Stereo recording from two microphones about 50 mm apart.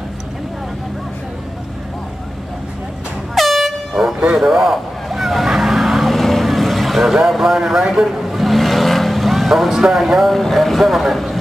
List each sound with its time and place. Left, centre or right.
3.3 s air horn: centre
4.4 s vehicle: centre
9.7 s speech: centre